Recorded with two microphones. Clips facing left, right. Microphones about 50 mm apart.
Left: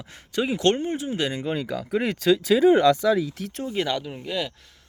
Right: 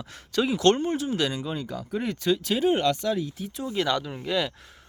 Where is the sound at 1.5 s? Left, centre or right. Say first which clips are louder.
Left 5 dB; left.